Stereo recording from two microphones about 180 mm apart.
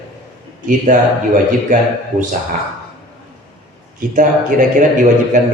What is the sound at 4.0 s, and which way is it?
Speech, 45° right (ahead or behind).